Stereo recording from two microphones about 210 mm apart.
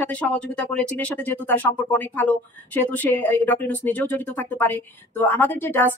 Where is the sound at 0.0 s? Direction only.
5° left (ahead or behind).